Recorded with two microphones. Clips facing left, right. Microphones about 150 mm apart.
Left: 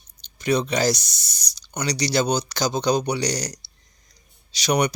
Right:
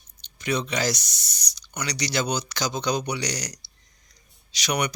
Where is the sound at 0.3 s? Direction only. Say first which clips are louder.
Left 5 dB; 35° left (ahead or behind).